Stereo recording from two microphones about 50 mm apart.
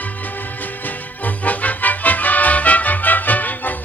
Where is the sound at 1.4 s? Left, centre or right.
Left.